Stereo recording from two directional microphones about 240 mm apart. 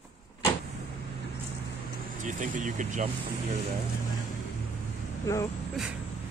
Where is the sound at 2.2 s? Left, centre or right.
Right.